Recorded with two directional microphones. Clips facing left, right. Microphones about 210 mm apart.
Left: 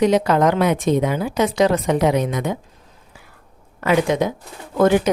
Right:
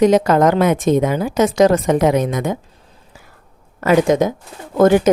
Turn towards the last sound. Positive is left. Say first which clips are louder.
# right 3 dB
turn(degrees=-45)  # may be behind; listen again after turning